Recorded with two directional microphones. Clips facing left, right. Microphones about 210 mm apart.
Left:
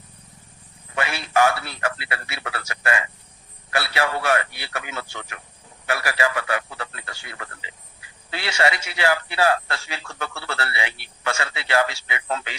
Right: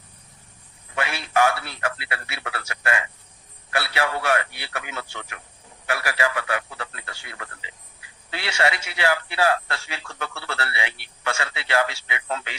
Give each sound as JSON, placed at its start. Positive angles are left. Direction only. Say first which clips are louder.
{"t": 0.9, "sound": "a man's voice", "louder": "left 1 dB", "side_deg": 35}
{"t": 8.3, "sound": "a man's voice", "louder": "left 1 dB", "side_deg": 40}